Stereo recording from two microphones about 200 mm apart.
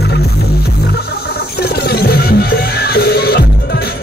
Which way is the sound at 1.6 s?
55° left (ahead or behind).